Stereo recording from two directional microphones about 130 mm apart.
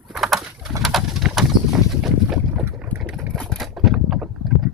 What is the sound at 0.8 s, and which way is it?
Boat, centre (ahead or behind).